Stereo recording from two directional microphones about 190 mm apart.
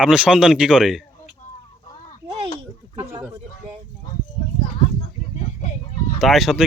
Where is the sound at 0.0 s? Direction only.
5° right (ahead or behind).